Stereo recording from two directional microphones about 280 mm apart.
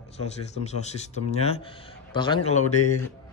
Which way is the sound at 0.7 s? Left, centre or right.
Left.